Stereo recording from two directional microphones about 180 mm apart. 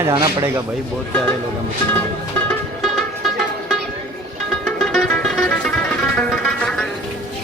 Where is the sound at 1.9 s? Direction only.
10° left (ahead or behind).